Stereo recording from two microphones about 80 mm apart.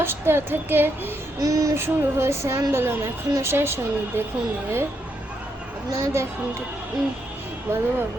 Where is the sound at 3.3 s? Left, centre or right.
Right.